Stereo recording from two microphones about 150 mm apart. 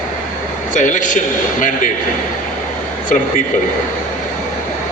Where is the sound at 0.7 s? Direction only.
60° left (ahead or behind).